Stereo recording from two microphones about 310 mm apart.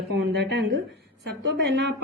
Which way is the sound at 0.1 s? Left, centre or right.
Right.